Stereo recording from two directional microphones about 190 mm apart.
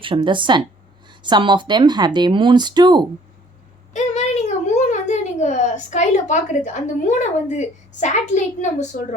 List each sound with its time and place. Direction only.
0.0 s speech: 25° right (ahead or behind)
3.9 s speech: 35° left (ahead or behind)